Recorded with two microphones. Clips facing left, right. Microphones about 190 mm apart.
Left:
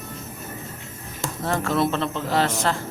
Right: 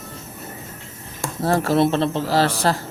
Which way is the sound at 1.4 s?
35° right (ahead or behind).